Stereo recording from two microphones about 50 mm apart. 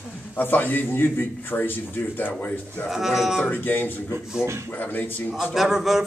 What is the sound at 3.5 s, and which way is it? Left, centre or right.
Speech, left.